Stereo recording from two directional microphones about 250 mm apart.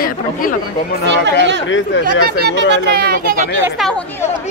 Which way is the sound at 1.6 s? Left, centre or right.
Left.